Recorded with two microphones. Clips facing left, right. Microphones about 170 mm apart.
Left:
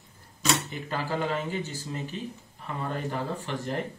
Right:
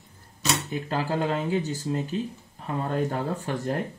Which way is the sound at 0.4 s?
Centre (ahead or behind).